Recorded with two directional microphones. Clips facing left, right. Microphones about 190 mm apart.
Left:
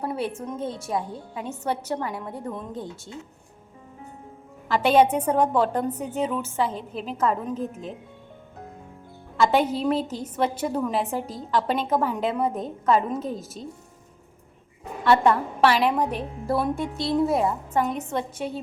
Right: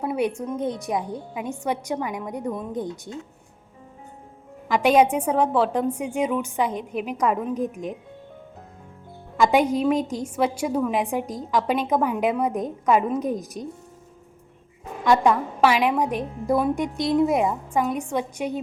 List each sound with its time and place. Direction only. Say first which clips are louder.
0.0 s a woman's voice: right 4 dB; 15° right (ahead or behind)
4.7 s a woman's voice: right 1 dB; 10° right (ahead or behind)
9.4 s a woman's voice: right 2 dB; 15° right (ahead or behind)
15.0 s a woman's voice: right 1 dB; 15° right (ahead or behind)